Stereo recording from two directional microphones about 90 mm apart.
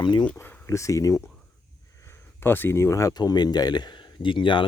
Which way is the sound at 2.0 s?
25° left (ahead or behind).